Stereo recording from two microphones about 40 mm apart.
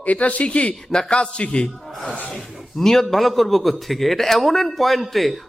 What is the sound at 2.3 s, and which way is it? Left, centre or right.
A man's voice, centre.